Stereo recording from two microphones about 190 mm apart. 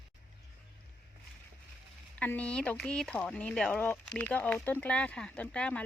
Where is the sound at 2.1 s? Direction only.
10° left (ahead or behind).